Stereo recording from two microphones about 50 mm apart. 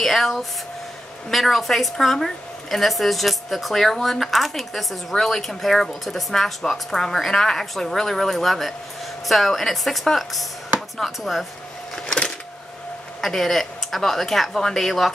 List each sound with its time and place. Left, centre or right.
0.0 s a woman's voice: centre
11.9 s a sound: centre
13.2 s a woman's voice: centre